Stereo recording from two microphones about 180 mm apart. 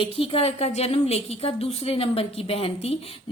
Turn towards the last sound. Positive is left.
turn(degrees=30)  # may be behind; listen again after turning